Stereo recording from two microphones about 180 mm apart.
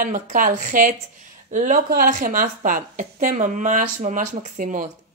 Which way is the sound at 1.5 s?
45° right (ahead or behind).